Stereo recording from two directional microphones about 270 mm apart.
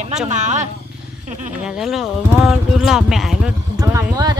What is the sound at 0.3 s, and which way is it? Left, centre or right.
Speech, right.